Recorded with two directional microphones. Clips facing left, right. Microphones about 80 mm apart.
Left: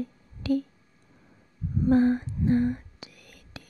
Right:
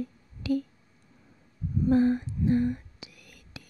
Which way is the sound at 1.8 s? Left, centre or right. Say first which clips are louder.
Left 2 dB; left.